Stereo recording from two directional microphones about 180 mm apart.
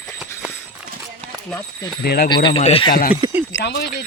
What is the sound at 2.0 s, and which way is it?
Speech, 55° left (ahead or behind).